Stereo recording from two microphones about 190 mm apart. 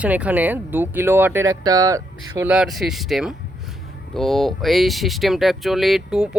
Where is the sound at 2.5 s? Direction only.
Centre (ahead or behind).